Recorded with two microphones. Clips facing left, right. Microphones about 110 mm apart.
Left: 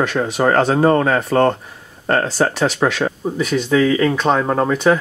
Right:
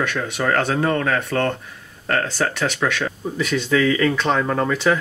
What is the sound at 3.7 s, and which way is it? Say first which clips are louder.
Speech: left 3 dB; 25° left (ahead or behind).